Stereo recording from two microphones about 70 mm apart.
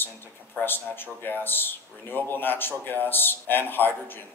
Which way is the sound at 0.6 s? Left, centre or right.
Left.